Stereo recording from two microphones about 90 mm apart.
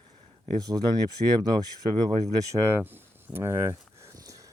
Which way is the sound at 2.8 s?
25° right (ahead or behind).